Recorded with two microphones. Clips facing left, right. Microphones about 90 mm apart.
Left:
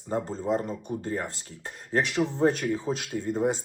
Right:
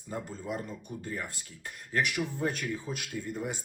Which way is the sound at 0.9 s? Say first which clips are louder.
Left 8 dB; 40° left (ahead or behind).